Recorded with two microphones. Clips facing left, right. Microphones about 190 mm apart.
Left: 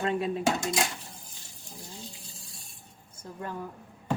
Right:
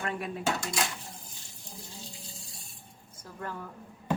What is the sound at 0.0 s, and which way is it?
Dishes, 25° left (ahead or behind).